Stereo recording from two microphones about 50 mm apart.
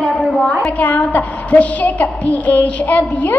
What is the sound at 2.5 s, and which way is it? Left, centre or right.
Child singing, left.